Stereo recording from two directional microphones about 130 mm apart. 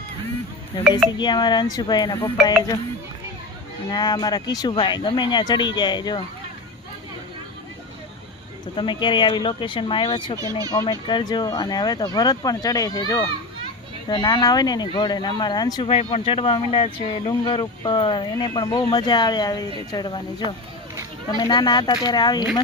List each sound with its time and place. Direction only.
1.2 s speech: 35° left (ahead or behind)
3.8 s speech: 30° left (ahead or behind)
8.7 s speech: 40° left (ahead or behind)
15.9 s speech: 50° left (ahead or behind); by 22.4 s 35° left (ahead or behind)